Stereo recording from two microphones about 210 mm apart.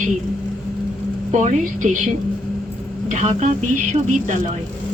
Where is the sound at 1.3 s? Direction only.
35° right (ahead or behind).